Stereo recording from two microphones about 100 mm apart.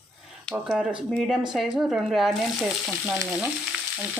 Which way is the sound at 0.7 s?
10° right (ahead or behind).